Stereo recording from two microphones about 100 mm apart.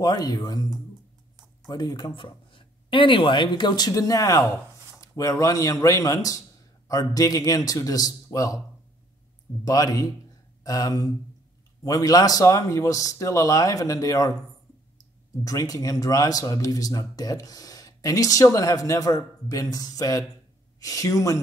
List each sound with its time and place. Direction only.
0.0 s speech: 40° left (ahead or behind)
1.7 s speech: 40° left (ahead or behind)
2.1 s speech: 60° left (ahead or behind); by 8.5 s 35° left (ahead or behind)
9.7 s speech: 35° left (ahead or behind)
15.4 s speech: 35° left (ahead or behind)